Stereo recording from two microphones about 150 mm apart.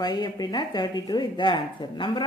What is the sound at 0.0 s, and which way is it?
Speech, 30° left (ahead or behind).